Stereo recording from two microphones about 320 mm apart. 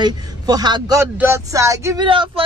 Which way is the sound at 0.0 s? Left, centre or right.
Centre.